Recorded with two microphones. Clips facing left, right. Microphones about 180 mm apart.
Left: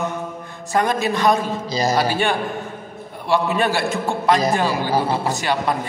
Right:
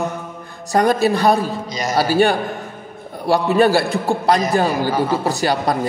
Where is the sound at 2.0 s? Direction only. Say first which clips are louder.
Right 4 dB; 40° right (ahead or behind).